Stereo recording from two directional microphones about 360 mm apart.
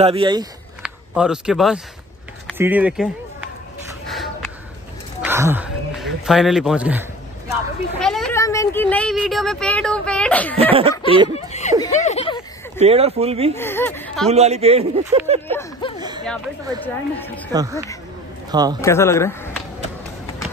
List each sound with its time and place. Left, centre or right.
0.0 s speech: centre
4.1 s a sound: centre
5.2 s speech: centre
10.6 s speech: centre
11.3 s snicker: centre
12.7 s speech: centre
13.6 s speech: centre
14.3 s speech: centre
15.4 s speech: centre
16.0 s a sound: centre
17.5 s a man's voice: centre
18.8 s speech: centre